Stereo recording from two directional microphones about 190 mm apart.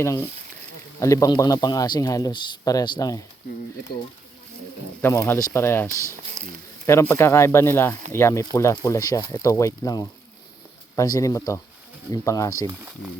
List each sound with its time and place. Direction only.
0.0 s speech: 15° left (ahead or behind)
5.0 s speech: 10° left (ahead or behind)
5.9 s speech: 15° right (ahead or behind)
6.8 s speech: 15° left (ahead or behind)